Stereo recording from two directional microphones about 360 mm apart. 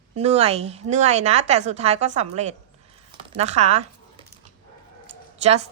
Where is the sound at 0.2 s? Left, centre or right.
Centre.